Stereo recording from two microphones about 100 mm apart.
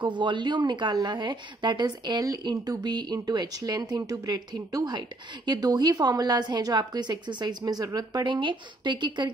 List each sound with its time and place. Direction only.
0.0 s a woman's voice: 50° right (ahead or behind)